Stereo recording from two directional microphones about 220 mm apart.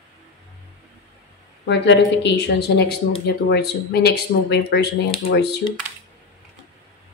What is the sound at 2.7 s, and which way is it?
Speech, 50° left (ahead or behind).